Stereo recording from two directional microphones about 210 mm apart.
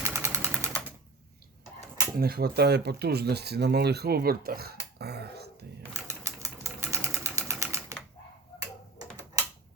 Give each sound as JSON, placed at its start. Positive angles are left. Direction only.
{"t": 0.0, "sound": "sewing machine", "side_deg": -15}
{"t": 2.1, "sound": "speech", "side_deg": -45}
{"t": 5.9, "sound": "typewriter", "side_deg": -15}